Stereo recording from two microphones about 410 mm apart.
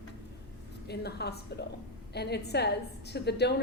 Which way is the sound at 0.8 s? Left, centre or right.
Left.